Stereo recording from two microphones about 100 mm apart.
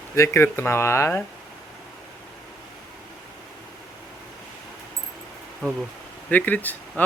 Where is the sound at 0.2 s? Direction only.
25° left (ahead or behind).